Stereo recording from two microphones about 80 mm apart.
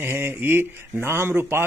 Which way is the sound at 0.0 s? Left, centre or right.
Right.